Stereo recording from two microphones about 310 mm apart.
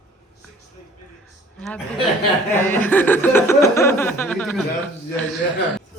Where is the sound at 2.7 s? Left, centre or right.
Centre.